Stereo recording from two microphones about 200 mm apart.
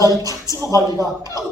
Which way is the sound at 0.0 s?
20° right (ahead or behind).